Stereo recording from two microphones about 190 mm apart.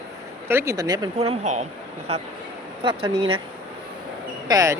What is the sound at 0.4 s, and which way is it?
Speech, 15° right (ahead or behind).